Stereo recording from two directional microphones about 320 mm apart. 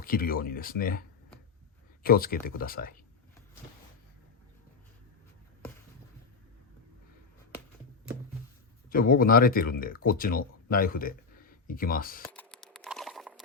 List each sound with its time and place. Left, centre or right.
0.0 s speech: left
2.0 s speech: left
8.9 s speech: left
12.3 s a sound: centre